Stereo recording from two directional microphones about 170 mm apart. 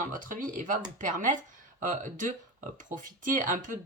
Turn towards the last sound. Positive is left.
turn(degrees=-50)  # may be behind; listen again after turning